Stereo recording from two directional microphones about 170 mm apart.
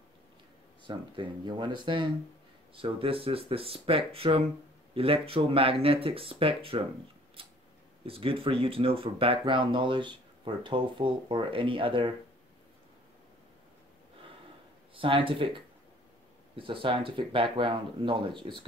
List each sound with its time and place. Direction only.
0.8 s speech: 30° right (ahead or behind)
7.4 s tick-tock: 30° right (ahead or behind)
8.0 s speech: 35° right (ahead or behind)
15.0 s speech: 30° right (ahead or behind)